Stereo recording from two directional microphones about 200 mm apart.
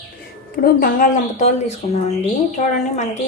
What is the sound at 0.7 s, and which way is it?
Speech, 40° left (ahead or behind).